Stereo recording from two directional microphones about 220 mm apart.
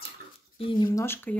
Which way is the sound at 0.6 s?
20° left (ahead or behind).